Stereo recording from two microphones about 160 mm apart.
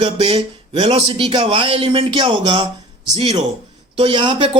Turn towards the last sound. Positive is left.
turn(degrees=-30)  # may be behind; listen again after turning